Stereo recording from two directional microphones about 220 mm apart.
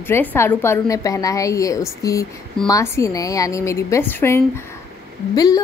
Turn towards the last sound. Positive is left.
turn(degrees=15)  # may be behind; listen again after turning